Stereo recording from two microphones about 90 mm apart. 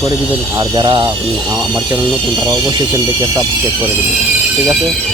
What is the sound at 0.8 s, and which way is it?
Speech, 65° right (ahead or behind).